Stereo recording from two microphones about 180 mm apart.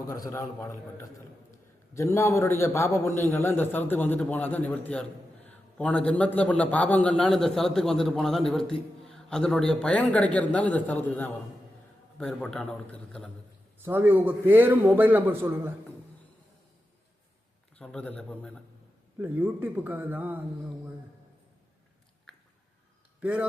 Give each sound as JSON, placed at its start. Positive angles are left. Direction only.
{"t": 0.3, "sound": "a man's voice", "side_deg": 15}
{"t": 12.1, "sound": "a man's voice", "side_deg": 5}
{"t": 13.8, "sound": "a man's voice", "side_deg": -10}
{"t": 17.7, "sound": "a man's voice", "side_deg": 5}
{"t": 19.2, "sound": "a man's voice", "side_deg": -10}
{"t": 23.2, "sound": "a man's voice", "side_deg": -10}